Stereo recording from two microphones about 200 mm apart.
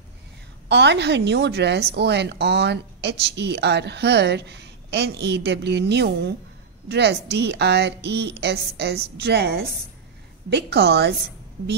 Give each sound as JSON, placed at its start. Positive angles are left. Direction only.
{"t": 0.7, "sound": "a woman's voice", "side_deg": -60}